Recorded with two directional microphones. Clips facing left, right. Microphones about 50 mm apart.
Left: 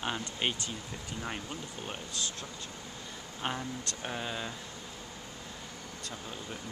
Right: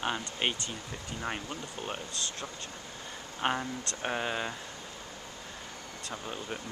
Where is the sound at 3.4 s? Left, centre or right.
Right.